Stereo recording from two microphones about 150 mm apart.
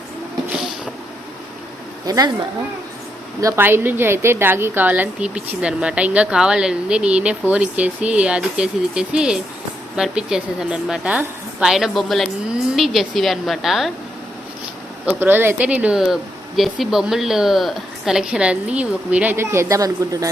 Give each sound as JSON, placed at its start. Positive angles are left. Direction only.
{"t": 2.0, "sound": "speech", "side_deg": -25}
{"t": 3.4, "sound": "a woman's voice", "side_deg": -15}
{"t": 15.0, "sound": "a woman's voice", "side_deg": -15}